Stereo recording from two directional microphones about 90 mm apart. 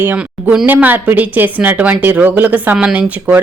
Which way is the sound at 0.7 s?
20° right (ahead or behind).